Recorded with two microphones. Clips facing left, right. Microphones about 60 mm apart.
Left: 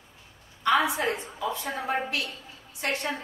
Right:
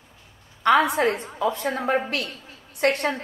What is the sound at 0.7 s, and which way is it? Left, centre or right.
A woman's voice, right.